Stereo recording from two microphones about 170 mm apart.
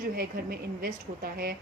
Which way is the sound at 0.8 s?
60° right (ahead or behind).